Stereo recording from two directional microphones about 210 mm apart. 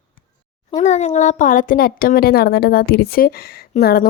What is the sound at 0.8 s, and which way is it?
Speech, 35° left (ahead or behind).